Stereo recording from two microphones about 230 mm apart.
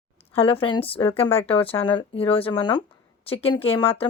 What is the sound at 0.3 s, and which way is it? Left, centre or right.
Speech, left.